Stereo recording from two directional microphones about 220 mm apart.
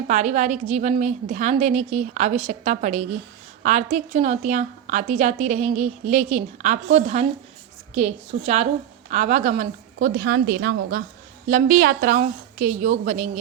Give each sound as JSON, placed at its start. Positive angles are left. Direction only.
{"t": 0.1, "sound": "a woman's voice", "side_deg": -30}
{"t": 10.2, "sound": "a woman's voice", "side_deg": -50}
{"t": 11.4, "sound": "a woman's voice", "side_deg": -40}